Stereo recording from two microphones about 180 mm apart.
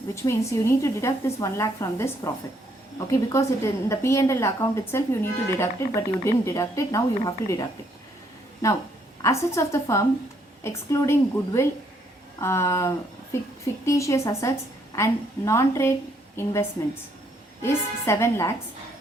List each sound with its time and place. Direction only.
0.1 s a woman's voice: 15° left (ahead or behind)
8.6 s a woman's voice: 15° left (ahead or behind)
17.6 s a woman's voice: 15° left (ahead or behind)